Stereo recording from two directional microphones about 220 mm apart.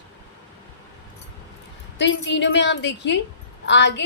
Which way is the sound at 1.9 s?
55° left (ahead or behind).